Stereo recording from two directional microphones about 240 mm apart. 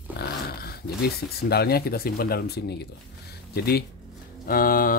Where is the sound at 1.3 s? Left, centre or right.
Left.